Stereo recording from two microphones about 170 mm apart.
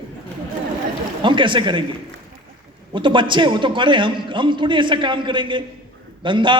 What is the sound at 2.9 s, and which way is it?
A man's voice, 30° right (ahead or behind).